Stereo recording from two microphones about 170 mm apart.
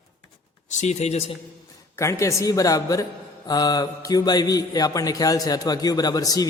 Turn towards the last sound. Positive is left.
turn(degrees=20)  # may be behind; listen again after turning